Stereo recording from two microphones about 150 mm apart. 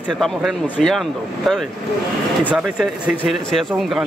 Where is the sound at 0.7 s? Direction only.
5° left (ahead or behind).